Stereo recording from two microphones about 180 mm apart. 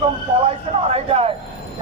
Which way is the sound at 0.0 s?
35° right (ahead or behind).